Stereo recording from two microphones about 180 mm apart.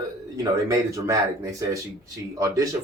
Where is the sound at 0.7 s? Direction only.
15° right (ahead or behind).